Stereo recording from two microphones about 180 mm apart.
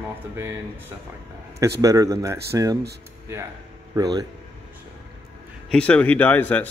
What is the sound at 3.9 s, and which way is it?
Speech, 20° right (ahead or behind).